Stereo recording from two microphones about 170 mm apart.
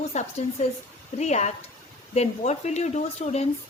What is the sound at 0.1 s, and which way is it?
Speech, 40° left (ahead or behind).